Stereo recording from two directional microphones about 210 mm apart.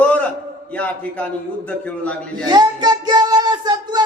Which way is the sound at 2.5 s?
20° right (ahead or behind).